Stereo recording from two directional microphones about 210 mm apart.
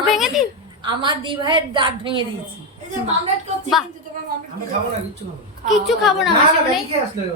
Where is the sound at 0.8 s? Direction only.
20° right (ahead or behind).